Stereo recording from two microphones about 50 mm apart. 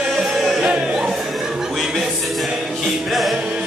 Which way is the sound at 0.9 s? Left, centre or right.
Centre.